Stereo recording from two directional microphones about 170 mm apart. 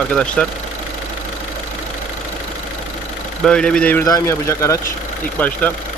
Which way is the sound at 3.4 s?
5° left (ahead or behind).